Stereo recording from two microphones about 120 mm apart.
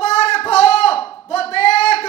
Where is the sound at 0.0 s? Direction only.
60° left (ahead or behind).